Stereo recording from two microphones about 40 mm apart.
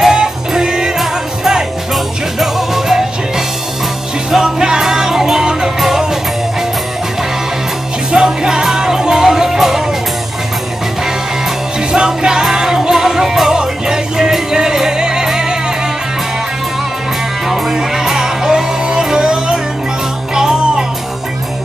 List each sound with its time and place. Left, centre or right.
0.0 s music: centre
8.1 s music: centre
11.9 s music: centre
17.7 s music: centre